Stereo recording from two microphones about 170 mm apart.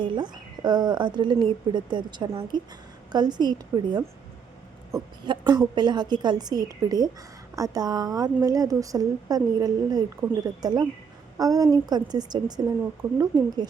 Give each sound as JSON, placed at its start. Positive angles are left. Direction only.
{"t": 0.0, "sound": "a woman's voice", "side_deg": -25}